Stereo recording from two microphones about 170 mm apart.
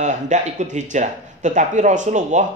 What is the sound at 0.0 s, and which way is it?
Speech, 45° right (ahead or behind).